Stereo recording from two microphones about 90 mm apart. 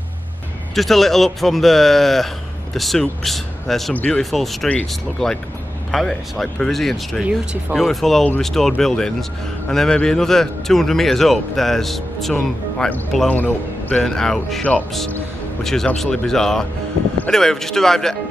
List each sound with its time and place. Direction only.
0.7 s speech: centre (ahead or behind)
12.4 s speech: 15° left (ahead or behind)
13.3 s a man's voice: 20° left (ahead or behind)
14.0 s speech: 5° left (ahead or behind)